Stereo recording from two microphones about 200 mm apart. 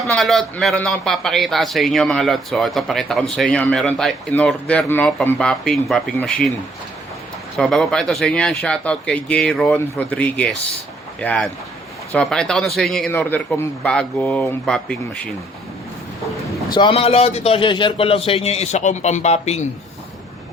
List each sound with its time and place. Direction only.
0.0 s a man's voice: centre (ahead or behind)
7.5 s a man's voice: centre (ahead or behind)
16.7 s a man's voice: 25° left (ahead or behind)